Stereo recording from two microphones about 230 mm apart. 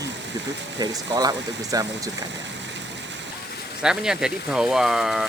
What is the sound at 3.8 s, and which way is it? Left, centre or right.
Speech, centre.